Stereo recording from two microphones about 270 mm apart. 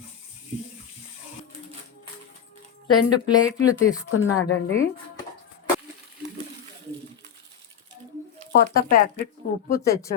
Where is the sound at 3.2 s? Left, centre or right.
Centre.